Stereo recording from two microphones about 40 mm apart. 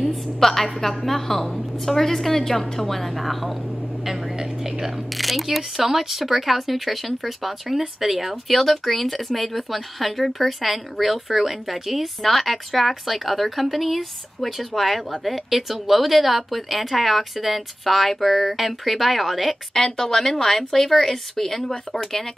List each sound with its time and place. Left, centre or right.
0.0 s a woman's voice: centre
19.7 s a woman's voice: centre